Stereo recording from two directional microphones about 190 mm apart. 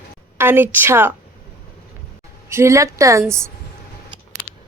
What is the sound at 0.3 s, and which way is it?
Speech, 10° right (ahead or behind).